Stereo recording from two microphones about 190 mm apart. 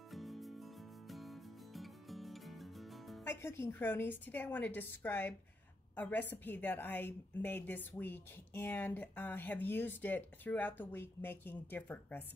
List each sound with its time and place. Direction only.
0.1 s music: centre (ahead or behind)
3.3 s a woman's voice: 10° left (ahead or behind)